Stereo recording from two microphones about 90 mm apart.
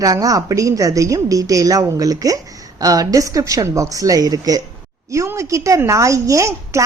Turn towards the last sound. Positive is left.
turn(degrees=-35)  # may be behind; listen again after turning